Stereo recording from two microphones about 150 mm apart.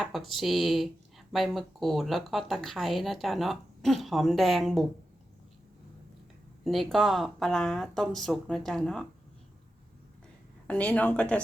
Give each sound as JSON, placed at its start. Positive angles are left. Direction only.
{"t": 0.0, "sound": "speech", "side_deg": 0}
{"t": 6.7, "sound": "speech", "side_deg": 0}
{"t": 10.7, "sound": "speech", "side_deg": 10}